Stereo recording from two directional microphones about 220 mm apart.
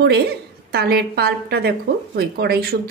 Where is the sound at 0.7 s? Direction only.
45° right (ahead or behind).